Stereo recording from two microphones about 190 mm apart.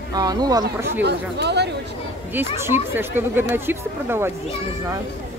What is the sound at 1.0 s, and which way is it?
Speech, 60° right (ahead or behind).